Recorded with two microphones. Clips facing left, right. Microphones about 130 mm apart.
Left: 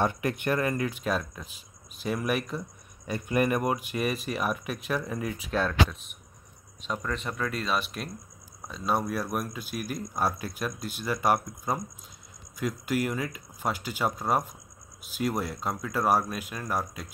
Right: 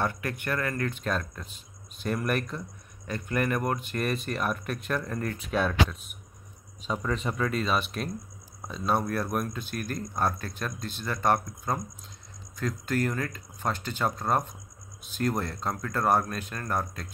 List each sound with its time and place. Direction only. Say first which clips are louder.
0.0 s speech: left 3 dB; 20° left (ahead or behind)
0.8 s speech: left 1 dB; 5° left (ahead or behind)
3.1 s speech: left 3 dB; 15° left (ahead or behind)